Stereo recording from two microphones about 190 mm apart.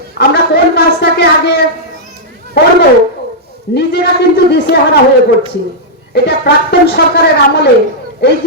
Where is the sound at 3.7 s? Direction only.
60° left (ahead or behind).